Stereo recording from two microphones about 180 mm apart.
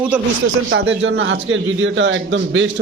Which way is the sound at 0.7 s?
90° right.